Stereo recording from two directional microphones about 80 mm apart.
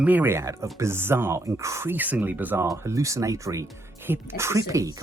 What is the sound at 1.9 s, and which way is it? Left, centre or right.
Speech, right.